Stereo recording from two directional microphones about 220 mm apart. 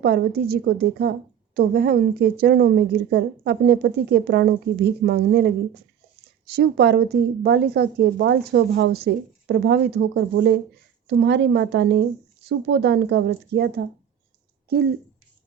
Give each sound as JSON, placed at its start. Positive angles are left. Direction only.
{"t": 0.0, "sound": "a woman's voice", "side_deg": -45}
{"t": 6.6, "sound": "a woman's voice", "side_deg": -50}